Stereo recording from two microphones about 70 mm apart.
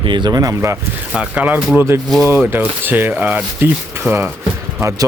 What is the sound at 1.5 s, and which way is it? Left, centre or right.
Rub, right.